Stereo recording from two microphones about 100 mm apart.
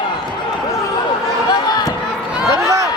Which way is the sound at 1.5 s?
40° left (ahead or behind).